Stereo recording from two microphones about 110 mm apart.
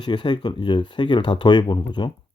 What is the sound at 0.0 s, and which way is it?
Speech, 45° left (ahead or behind).